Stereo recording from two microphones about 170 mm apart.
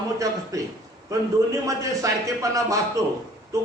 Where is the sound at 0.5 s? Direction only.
20° right (ahead or behind).